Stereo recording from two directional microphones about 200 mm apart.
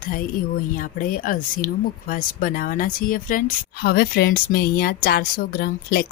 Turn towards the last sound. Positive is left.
turn(degrees=50)  # may be behind; listen again after turning